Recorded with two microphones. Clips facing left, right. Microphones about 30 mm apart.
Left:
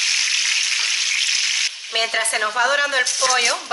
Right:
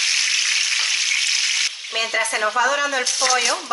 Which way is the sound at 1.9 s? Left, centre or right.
Left.